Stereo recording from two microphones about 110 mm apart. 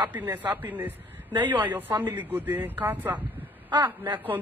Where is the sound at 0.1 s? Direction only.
20° right (ahead or behind).